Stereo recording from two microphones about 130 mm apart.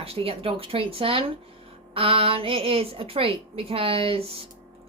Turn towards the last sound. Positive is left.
turn(degrees=-50)  # may be behind; listen again after turning